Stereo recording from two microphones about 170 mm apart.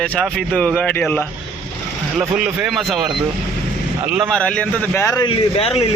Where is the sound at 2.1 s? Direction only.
5° right (ahead or behind).